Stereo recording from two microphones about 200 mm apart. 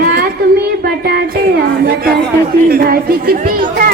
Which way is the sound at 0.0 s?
45° right (ahead or behind).